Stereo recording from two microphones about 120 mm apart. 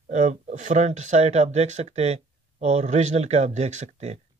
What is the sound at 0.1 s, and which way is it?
Speech, 85° right.